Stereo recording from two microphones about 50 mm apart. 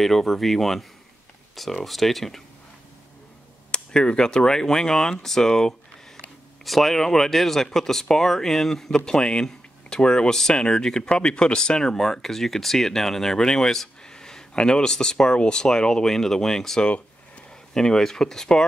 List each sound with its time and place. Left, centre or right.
0.0 s speech: centre
3.7 s speech: centre
16.8 s a sound: left
17.7 s speech: centre